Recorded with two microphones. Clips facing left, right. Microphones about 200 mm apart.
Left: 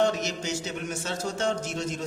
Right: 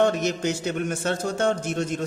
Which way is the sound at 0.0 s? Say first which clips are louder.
Right 4 dB; 55° right (ahead or behind).